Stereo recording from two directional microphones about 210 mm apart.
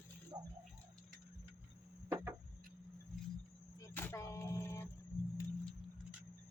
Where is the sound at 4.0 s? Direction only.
10° left (ahead or behind).